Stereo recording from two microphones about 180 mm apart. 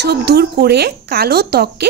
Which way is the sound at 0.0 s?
65° right (ahead or behind).